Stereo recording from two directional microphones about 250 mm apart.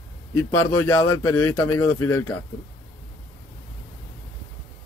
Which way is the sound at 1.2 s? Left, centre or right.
Centre.